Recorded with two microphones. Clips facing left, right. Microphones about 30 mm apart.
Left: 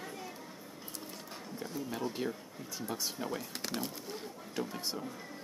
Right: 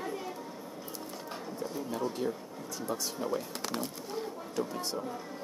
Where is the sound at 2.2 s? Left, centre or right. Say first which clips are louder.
Right 3 dB; centre.